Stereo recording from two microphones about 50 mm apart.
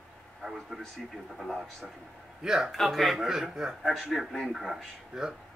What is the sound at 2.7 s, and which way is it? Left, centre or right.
Speech, centre.